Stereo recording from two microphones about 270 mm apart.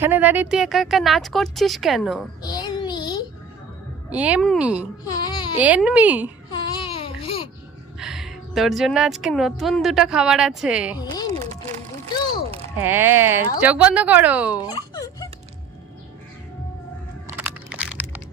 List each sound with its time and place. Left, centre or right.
0.0 s speech: centre
2.4 s child singing: centre
4.1 s speech: centre
5.0 s baby cry: centre
5.5 s speech: centre
6.5 s babbling: centre
7.9 s a woman's voice: centre
11.0 s a sound: centre
12.7 s speech: centre
14.6 s a sound: centre
17.2 s crushing: centre